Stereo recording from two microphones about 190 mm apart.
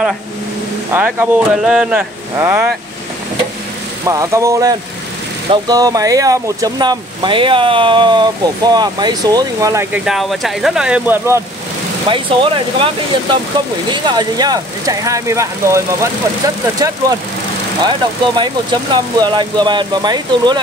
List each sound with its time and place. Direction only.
0.9 s speech: 10° right (ahead or behind)
4.0 s speech: 15° right (ahead or behind)
10.0 s speech: centre (ahead or behind)
12.1 s speech: 25° right (ahead or behind)